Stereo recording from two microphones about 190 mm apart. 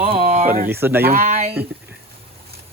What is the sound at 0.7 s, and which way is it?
Speech, 10° right (ahead or behind).